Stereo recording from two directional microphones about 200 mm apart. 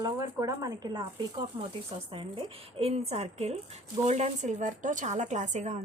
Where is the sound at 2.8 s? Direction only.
30° right (ahead or behind).